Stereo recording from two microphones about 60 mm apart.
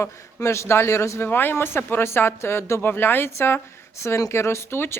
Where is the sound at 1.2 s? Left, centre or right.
Left.